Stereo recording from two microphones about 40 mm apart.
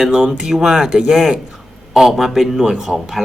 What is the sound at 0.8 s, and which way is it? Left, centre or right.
Speech, right.